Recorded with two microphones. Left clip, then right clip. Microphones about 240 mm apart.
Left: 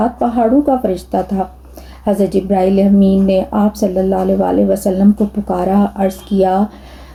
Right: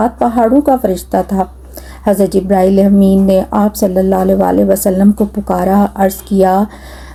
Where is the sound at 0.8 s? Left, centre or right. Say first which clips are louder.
Right 3 dB; right.